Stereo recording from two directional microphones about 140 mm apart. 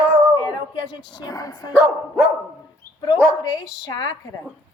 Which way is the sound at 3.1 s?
25° left (ahead or behind).